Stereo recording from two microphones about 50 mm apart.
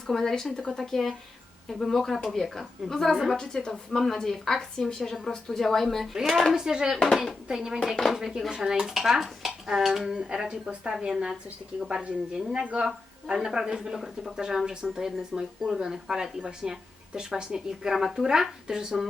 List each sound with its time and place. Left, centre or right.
0.1 s a woman's voice: centre
6.5 s speech: centre